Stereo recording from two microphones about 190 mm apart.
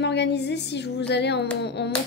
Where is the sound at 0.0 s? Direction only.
65° left (ahead or behind).